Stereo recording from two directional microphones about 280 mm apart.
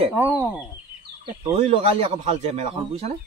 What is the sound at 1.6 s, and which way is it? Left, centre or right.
Speech, right.